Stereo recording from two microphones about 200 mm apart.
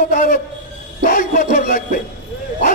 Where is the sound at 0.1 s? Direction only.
45° left (ahead or behind).